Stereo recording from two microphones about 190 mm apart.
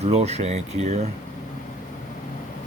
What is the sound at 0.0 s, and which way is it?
Speech, 35° right (ahead or behind).